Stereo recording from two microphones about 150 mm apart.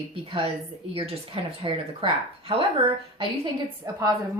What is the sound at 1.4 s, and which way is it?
Speech, 35° right (ahead or behind).